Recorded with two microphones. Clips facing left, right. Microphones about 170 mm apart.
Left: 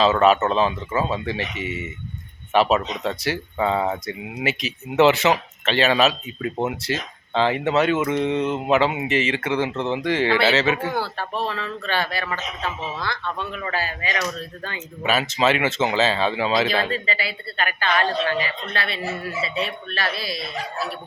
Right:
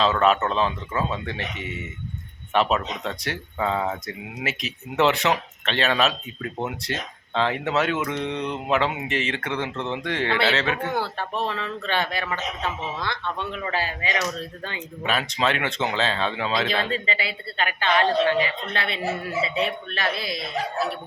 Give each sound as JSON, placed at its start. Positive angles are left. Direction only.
{"t": 0.0, "sound": "speech", "side_deg": 5}
{"t": 10.9, "sound": "a woman's voice", "side_deg": -20}
{"t": 15.0, "sound": "speech", "side_deg": 5}
{"t": 16.9, "sound": "a woman's voice", "side_deg": -20}